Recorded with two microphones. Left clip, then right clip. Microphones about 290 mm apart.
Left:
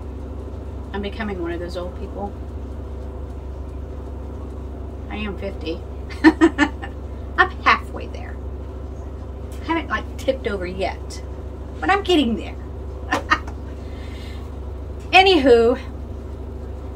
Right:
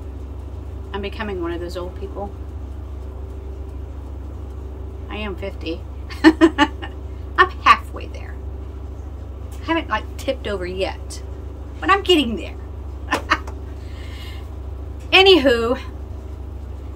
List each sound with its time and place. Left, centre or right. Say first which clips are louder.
0.9 s a woman's voice: right 1 dB; centre
5.1 s a woman's voice: right 1 dB; centre
6.2 s a sound: right 1 dB; centre
9.7 s a woman's voice: right 2 dB; centre
15.0 s a woman's voice: even; centre